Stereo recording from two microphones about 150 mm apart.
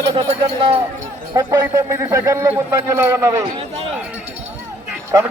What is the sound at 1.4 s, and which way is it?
A man's voice, 20° right (ahead or behind).